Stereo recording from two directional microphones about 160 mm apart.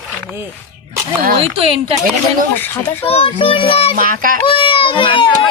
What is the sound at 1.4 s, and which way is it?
Speech, 35° right (ahead or behind).